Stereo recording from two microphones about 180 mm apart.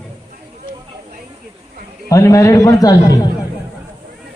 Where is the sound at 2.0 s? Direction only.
20° left (ahead or behind).